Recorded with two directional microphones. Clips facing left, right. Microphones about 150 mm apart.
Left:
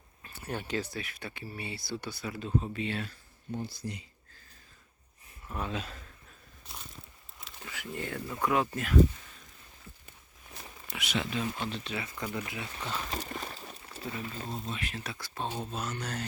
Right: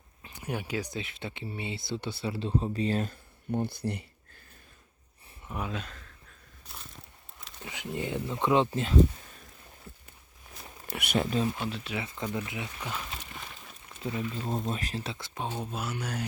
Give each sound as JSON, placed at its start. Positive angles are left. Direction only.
{"t": 0.2, "sound": "speech", "side_deg": -15}
{"t": 5.5, "sound": "speech", "side_deg": -10}
{"t": 5.7, "sound": "speech", "side_deg": 5}
{"t": 7.6, "sound": "a sound", "side_deg": -20}
{"t": 7.9, "sound": "speech", "side_deg": -20}
{"t": 10.9, "sound": "speech", "side_deg": -55}
{"t": 11.5, "sound": "speech", "side_deg": -10}
{"t": 11.9, "sound": "speech", "side_deg": -20}
{"t": 13.1, "sound": "a sound", "side_deg": 40}
{"t": 14.0, "sound": "speech", "side_deg": -25}
{"t": 14.5, "sound": "speech", "side_deg": -45}
{"t": 15.5, "sound": "speech", "side_deg": -10}